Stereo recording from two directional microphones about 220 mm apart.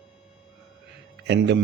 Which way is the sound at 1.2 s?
50° right (ahead or behind).